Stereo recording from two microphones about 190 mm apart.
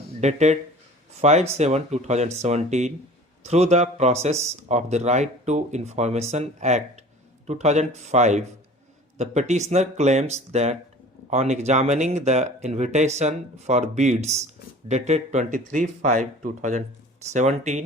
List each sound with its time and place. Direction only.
0.2 s speech: 35° right (ahead or behind)